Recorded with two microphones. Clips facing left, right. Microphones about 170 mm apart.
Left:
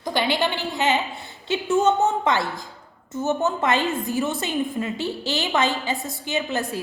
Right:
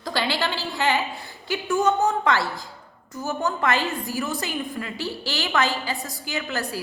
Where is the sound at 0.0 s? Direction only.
20° left (ahead or behind).